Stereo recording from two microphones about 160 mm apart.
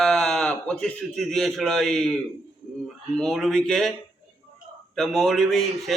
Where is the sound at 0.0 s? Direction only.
5° left (ahead or behind).